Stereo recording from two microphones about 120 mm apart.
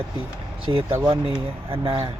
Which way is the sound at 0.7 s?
35° right (ahead or behind).